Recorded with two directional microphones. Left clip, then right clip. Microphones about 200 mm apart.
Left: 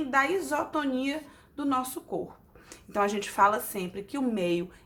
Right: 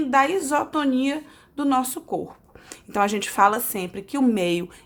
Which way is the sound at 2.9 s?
45° right (ahead or behind).